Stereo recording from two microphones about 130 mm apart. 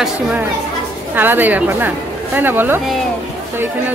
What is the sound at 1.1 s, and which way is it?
A woman's voice, 15° right (ahead or behind).